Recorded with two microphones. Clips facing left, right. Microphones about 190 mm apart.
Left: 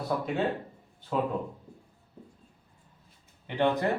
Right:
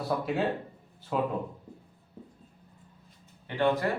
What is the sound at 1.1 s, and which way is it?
Speech, 5° right (ahead or behind).